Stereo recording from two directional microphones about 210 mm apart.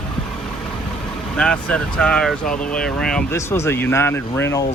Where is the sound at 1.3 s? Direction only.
5° left (ahead or behind).